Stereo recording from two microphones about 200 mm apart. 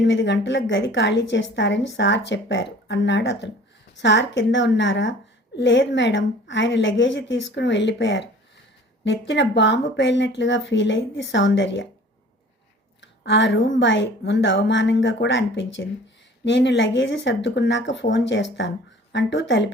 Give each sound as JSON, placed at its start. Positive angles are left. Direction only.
{"t": 0.0, "sound": "a woman's voice", "side_deg": 60}
{"t": 13.0, "sound": "a woman's voice", "side_deg": 65}